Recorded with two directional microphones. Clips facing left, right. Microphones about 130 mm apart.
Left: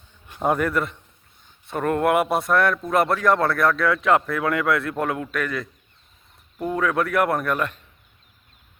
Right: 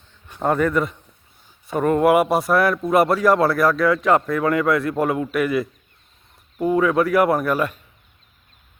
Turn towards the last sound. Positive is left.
turn(degrees=-5)  # may be behind; listen again after turning